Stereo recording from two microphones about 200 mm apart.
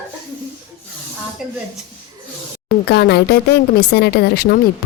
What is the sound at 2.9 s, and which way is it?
Speech, 55° left (ahead or behind).